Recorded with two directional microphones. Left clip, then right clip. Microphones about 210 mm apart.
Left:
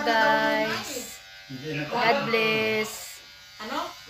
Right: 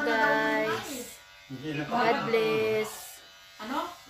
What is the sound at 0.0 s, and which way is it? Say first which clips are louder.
Child singing: left 4 dB; centre (ahead or behind).